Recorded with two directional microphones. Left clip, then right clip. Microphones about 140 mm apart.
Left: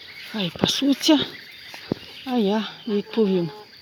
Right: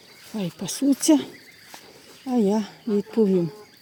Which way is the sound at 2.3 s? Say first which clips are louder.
Even; 30° right (ahead or behind).